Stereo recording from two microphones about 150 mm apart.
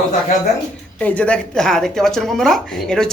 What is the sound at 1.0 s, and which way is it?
Speech, 10° left (ahead or behind).